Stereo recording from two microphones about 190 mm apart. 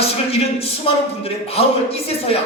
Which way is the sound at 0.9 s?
30° left (ahead or behind).